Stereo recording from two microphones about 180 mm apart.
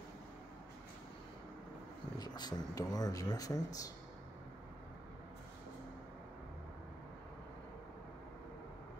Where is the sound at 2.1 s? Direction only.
20° left (ahead or behind).